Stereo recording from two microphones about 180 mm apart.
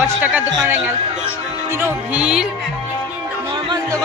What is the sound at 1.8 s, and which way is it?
Music, 5° right (ahead or behind).